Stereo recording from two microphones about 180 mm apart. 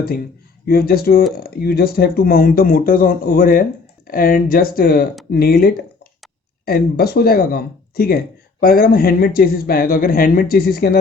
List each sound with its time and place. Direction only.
0.0 s speech: 55° left (ahead or behind)